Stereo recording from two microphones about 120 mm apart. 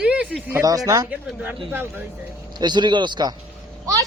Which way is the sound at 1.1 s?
15° right (ahead or behind).